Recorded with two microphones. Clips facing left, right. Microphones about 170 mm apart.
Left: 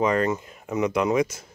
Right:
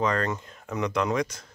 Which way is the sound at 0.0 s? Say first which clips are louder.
Left 4 dB; 10° left (ahead or behind).